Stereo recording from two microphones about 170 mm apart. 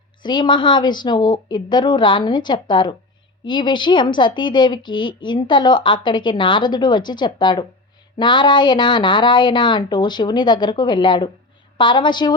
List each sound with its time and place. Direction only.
0.2 s a woman's voice: 25° left (ahead or behind)